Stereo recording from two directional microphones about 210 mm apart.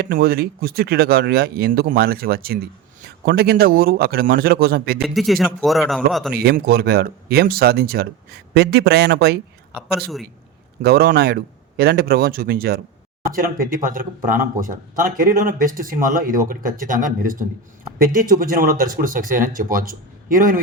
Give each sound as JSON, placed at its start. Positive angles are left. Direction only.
{"t": 0.0, "sound": "speech", "side_deg": -45}
{"t": 5.0, "sound": "a man's voice", "side_deg": 0}
{"t": 6.3, "sound": "speech", "side_deg": -45}
{"t": 10.8, "sound": "speech", "side_deg": -45}